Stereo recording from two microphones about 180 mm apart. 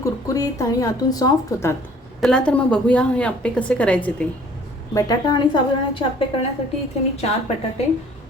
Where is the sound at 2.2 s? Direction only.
5° left (ahead or behind).